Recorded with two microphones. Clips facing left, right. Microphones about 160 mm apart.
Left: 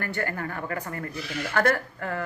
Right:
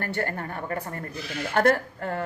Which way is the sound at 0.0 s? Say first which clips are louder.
Right 1 dB; 30° right (ahead or behind).